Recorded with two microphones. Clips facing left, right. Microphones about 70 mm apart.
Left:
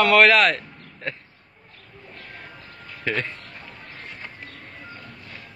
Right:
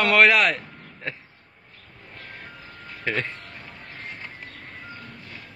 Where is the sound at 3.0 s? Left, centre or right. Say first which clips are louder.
Left 1 dB; centre.